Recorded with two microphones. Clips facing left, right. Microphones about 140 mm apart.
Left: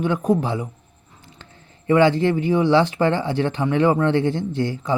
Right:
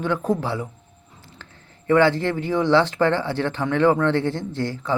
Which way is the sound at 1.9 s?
15° left (ahead or behind).